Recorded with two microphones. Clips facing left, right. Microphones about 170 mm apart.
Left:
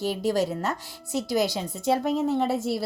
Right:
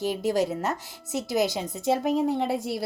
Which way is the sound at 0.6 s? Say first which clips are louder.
Even; 20° right (ahead or behind).